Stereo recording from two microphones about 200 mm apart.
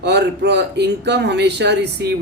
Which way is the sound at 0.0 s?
60° right (ahead or behind).